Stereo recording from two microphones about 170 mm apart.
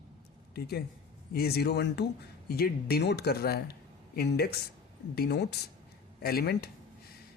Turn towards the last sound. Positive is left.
turn(degrees=70)  # may be behind; listen again after turning